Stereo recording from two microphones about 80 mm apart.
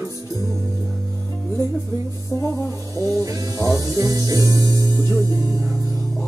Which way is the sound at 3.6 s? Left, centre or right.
Right.